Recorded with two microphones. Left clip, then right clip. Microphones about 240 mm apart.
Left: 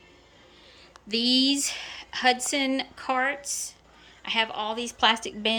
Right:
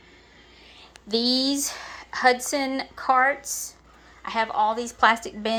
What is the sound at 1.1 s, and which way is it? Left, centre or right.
Speech, left.